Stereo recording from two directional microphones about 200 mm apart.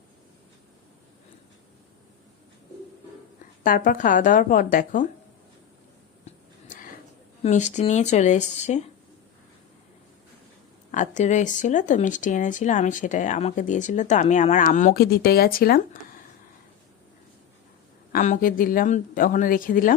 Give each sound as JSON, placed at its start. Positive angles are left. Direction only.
{"t": 3.6, "sound": "speech", "side_deg": 45}
{"t": 6.2, "sound": "a sound", "side_deg": 40}
{"t": 7.4, "sound": "speech", "side_deg": 35}
{"t": 10.9, "sound": "speech", "side_deg": 40}
{"t": 18.1, "sound": "speech", "side_deg": 40}